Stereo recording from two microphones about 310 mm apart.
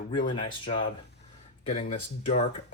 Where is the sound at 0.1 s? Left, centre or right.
Centre.